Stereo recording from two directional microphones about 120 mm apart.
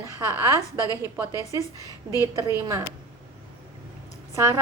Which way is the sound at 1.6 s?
30° left (ahead or behind).